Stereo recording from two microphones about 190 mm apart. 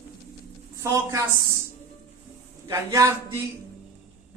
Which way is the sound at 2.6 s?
15° right (ahead or behind).